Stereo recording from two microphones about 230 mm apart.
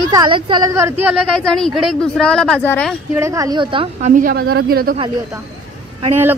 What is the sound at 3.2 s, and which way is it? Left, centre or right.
Speech, centre.